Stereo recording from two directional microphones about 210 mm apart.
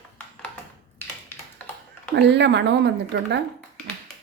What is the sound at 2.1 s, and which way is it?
Speech, 55° right (ahead or behind).